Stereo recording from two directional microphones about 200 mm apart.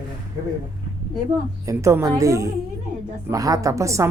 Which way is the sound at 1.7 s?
15° right (ahead or behind).